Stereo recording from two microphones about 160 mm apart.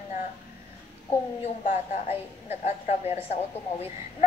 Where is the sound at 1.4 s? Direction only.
40° left (ahead or behind).